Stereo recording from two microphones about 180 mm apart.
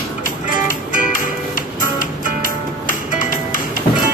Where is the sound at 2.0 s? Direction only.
50° left (ahead or behind).